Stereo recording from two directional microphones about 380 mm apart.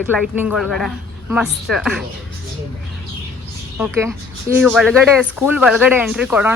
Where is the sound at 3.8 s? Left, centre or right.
Centre.